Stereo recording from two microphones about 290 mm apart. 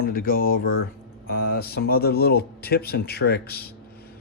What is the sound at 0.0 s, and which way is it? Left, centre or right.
Speech, left.